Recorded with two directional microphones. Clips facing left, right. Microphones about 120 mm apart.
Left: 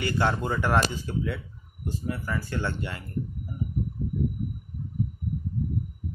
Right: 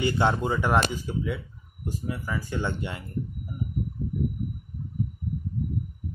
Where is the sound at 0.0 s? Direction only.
20° right (ahead or behind).